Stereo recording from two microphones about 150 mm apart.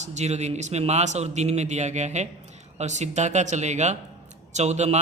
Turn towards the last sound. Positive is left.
turn(degrees=-45)  # may be behind; listen again after turning